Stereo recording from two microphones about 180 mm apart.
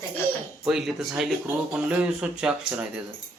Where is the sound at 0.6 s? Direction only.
Centre (ahead or behind).